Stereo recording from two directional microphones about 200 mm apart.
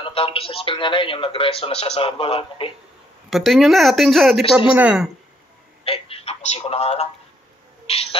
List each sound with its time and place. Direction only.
0.0 s a man's voice: 30° left (ahead or behind)
3.3 s speech: centre (ahead or behind)
5.9 s a sound: 30° left (ahead or behind)
7.8 s owl: 30° left (ahead or behind)